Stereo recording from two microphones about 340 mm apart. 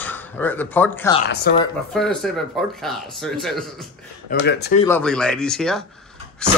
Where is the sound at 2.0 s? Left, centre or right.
Centre.